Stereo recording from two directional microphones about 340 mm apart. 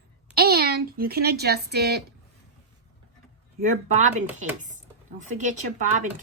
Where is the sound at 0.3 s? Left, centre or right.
Right.